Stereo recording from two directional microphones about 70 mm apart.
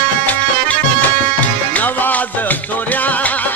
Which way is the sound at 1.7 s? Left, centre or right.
Left.